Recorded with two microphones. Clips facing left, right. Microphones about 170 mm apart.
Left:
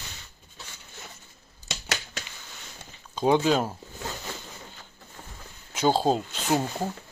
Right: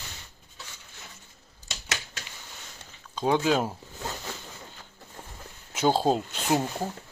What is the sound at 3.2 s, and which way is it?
Speech, centre (ahead or behind).